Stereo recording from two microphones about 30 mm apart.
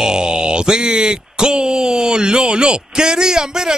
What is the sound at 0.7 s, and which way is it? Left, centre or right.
A man's voice, right.